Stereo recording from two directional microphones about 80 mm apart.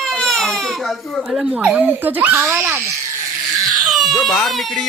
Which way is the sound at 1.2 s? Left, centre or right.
Centre.